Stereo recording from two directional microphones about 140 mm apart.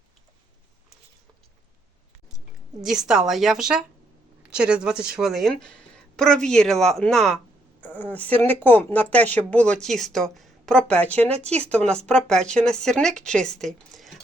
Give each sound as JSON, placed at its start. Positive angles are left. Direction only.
{"t": 2.8, "sound": "speech", "side_deg": -5}
{"t": 11.2, "sound": "speech", "side_deg": -45}
{"t": 11.5, "sound": "speech", "side_deg": 10}